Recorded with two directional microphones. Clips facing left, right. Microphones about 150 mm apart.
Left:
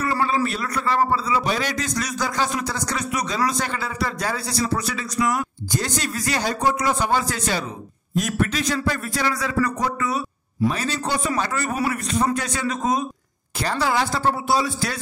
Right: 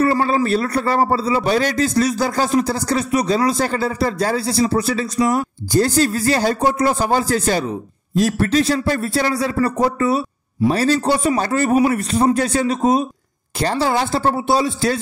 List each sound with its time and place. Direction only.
0.0 s a man's voice: 40° right (ahead or behind)